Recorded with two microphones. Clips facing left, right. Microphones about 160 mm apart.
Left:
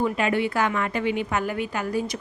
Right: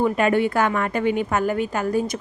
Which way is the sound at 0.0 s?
50° right (ahead or behind).